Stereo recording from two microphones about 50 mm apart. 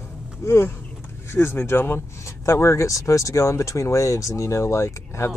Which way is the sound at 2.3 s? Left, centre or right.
Left.